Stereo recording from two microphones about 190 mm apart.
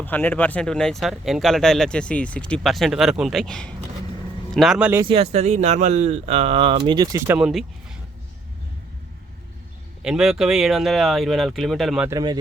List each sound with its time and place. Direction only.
0.0 s speech: 10° left (ahead or behind); by 5.0 s 10° right (ahead or behind)
5.0 s speech: 30° right (ahead or behind)
7.3 s speech: 5° right (ahead or behind)
10.0 s speech: 5° right (ahead or behind)
12.0 s speech: 20° right (ahead or behind)